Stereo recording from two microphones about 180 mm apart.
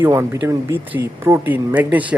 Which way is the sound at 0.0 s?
15° right (ahead or behind).